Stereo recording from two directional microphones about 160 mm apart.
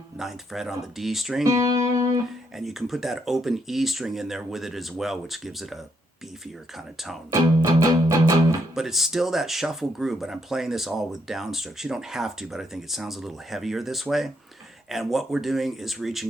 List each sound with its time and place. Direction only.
0.2 s speech: centre (ahead or behind)
1.5 s music: 20° right (ahead or behind)
2.6 s speech: centre (ahead or behind)
7.3 s music: 20° right (ahead or behind)
8.7 s speech: centre (ahead or behind)